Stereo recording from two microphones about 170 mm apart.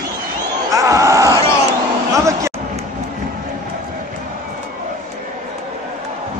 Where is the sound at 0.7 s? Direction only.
20° right (ahead or behind).